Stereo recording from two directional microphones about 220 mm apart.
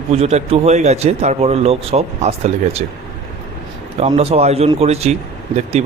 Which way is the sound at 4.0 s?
30° right (ahead or behind).